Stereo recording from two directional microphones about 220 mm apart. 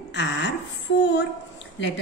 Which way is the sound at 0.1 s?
50° left (ahead or behind).